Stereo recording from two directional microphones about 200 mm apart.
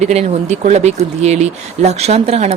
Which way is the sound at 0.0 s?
35° right (ahead or behind).